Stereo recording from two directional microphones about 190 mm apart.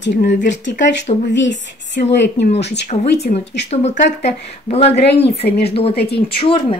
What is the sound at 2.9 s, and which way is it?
Speech, 30° left (ahead or behind).